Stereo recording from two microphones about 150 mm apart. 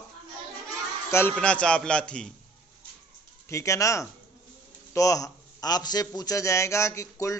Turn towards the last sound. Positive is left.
turn(degrees=20)  # may be behind; listen again after turning